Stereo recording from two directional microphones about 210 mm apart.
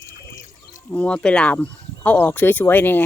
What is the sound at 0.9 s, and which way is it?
Speech, 5° left (ahead or behind).